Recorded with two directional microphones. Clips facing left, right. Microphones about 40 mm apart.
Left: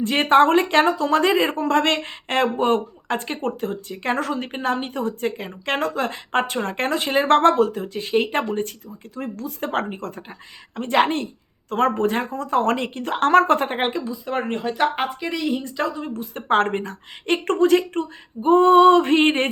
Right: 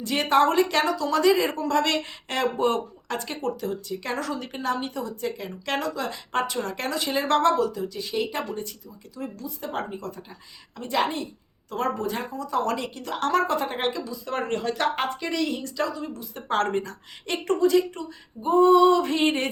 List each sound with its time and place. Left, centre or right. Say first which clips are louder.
0.0 s speech: left 5 dB; left; by 15.7 s centre
15.8 s speech: left 3 dB; left